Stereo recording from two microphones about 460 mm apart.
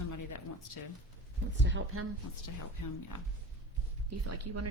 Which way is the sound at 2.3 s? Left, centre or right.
Left.